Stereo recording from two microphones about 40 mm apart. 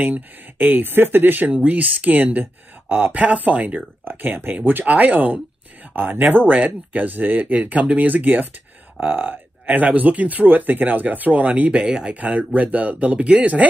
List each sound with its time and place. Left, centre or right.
0.6 s speech: right
1.7 s speech: right
3.2 s speech: right
4.0 s speech: right
4.8 s speech: right
7.8 s speech: right
8.1 s speech: right
11.7 s speech: right
12.1 s speech: right